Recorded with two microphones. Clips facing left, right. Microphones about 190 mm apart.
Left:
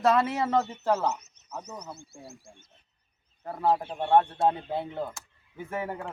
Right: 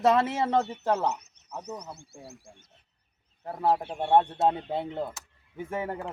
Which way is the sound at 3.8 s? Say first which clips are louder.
Even; 15° right (ahead or behind).